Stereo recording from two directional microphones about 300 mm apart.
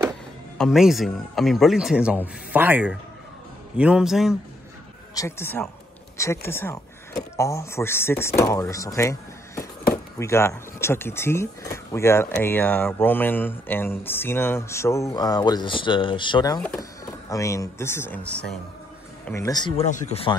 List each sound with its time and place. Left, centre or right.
0.6 s speech: centre
5.1 s speech: centre
10.1 s speech: centre